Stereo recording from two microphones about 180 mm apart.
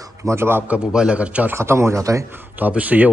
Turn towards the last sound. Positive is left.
turn(degrees=-10)  # may be behind; listen again after turning